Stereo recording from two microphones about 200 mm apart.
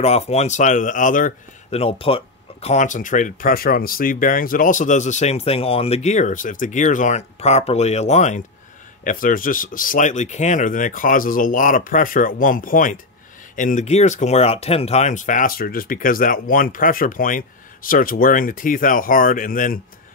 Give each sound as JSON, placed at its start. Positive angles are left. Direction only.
{"t": 0.0, "sound": "speech", "side_deg": 30}
{"t": 1.8, "sound": "speech", "side_deg": 30}